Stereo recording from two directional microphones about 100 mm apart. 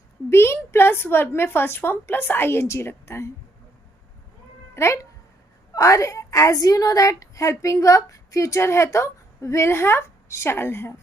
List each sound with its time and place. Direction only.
0.3 s a woman's voice: 25° left (ahead or behind)
4.7 s cat: 25° left (ahead or behind)
5.7 s a woman's voice: 35° left (ahead or behind)